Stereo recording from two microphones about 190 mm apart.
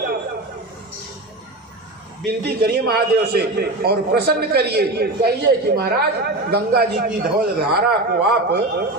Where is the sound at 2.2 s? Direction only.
55° right (ahead or behind).